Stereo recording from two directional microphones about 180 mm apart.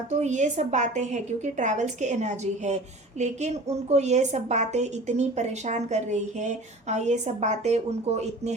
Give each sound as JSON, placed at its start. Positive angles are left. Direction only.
{"t": 0.1, "sound": "a woman's voice", "side_deg": -40}